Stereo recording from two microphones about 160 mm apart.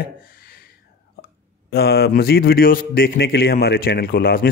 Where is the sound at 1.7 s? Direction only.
85° left.